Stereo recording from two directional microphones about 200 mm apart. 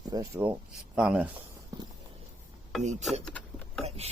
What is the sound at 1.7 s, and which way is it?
Walk, 15° right (ahead or behind).